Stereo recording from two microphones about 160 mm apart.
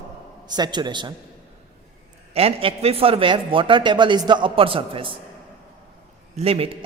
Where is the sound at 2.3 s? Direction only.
35° right (ahead or behind).